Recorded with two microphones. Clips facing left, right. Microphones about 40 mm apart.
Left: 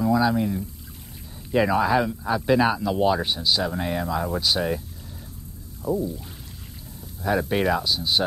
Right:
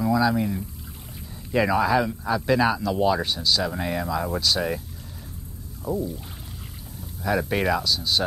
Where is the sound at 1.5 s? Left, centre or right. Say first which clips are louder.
Even; centre.